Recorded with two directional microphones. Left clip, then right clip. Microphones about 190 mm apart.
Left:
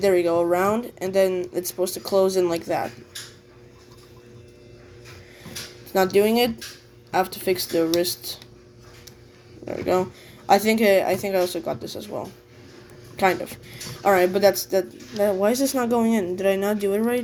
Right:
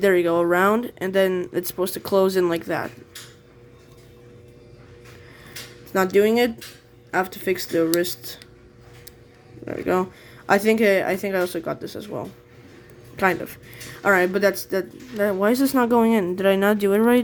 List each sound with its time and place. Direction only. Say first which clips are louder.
0.0 s speech: right 1 dB; 45° right (ahead or behind)
5.9 s speech: right 1 dB; 45° right (ahead or behind)
9.6 s speech: even; 40° right (ahead or behind); by 17.2 s 55° right (ahead or behind)